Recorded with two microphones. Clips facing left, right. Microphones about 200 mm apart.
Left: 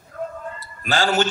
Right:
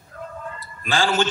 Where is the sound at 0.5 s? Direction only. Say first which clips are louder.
Even; 40° left (ahead or behind).